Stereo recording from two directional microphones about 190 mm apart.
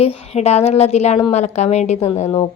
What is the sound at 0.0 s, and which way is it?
A woman's voice, 35° left (ahead or behind).